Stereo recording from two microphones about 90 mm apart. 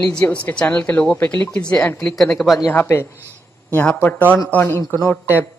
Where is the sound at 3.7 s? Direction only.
15° left (ahead or behind).